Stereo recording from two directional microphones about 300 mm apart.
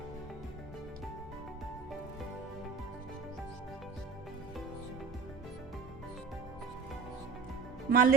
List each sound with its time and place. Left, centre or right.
7.9 s speech: right